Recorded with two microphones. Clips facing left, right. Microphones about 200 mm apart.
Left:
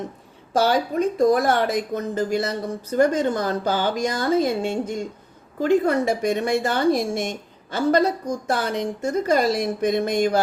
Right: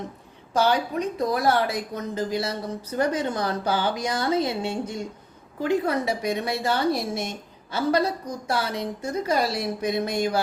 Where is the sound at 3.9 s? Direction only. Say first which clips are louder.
Left 3 dB; 50° left (ahead or behind).